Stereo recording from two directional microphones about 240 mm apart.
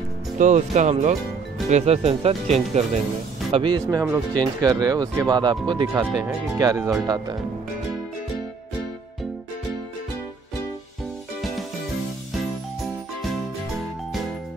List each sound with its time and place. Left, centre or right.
0.4 s speech: right
5.9 s speech: centre